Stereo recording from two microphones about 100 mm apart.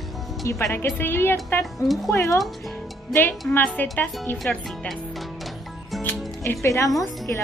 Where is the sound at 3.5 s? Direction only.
15° left (ahead or behind).